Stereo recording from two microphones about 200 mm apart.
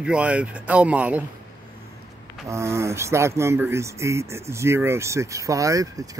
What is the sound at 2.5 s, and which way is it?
Speech, 15° right (ahead or behind).